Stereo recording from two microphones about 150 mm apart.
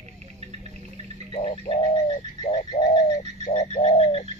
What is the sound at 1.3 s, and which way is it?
Bird, 40° left (ahead or behind).